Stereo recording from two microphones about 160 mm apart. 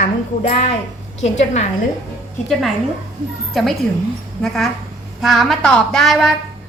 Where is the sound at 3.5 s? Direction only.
Centre (ahead or behind).